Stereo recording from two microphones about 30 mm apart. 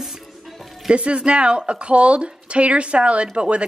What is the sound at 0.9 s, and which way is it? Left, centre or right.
Speech, right.